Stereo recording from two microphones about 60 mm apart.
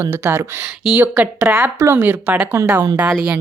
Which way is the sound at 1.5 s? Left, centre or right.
Right.